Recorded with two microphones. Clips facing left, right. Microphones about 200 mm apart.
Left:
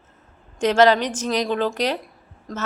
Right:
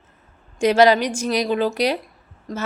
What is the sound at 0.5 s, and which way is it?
A woman's voice, 10° right (ahead or behind).